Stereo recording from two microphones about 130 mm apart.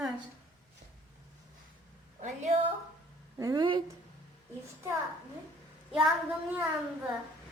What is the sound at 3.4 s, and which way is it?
Speech, 25° right (ahead or behind).